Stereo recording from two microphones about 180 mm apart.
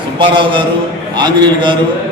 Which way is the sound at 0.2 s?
25° right (ahead or behind).